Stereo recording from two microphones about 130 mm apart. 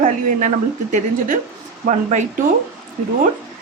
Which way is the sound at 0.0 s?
70° right (ahead or behind).